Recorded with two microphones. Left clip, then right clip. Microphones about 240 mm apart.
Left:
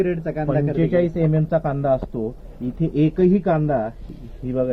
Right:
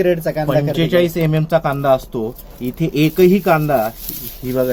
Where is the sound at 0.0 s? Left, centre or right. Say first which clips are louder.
Right 7 dB; right.